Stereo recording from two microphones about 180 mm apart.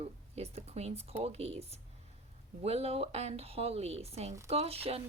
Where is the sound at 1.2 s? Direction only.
35° right (ahead or behind).